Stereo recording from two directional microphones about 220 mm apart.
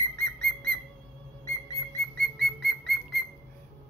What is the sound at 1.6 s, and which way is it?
Whistle, 15° left (ahead or behind).